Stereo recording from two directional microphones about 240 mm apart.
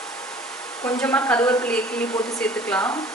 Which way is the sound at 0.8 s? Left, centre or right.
Centre.